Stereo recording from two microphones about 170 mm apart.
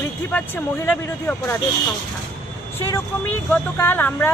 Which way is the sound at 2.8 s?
15° left (ahead or behind).